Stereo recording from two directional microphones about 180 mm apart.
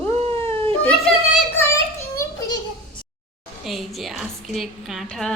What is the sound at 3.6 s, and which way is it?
A woman's voice, centre (ahead or behind).